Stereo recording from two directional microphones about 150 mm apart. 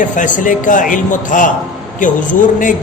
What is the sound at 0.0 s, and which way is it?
A man's voice, 60° left (ahead or behind).